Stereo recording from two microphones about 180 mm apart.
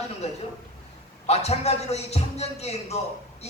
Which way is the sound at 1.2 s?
35° left (ahead or behind).